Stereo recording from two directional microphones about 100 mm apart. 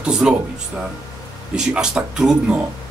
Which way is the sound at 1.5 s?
5° right (ahead or behind).